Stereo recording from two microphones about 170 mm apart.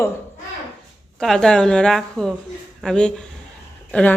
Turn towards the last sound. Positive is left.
turn(degrees=5)  # may be behind; listen again after turning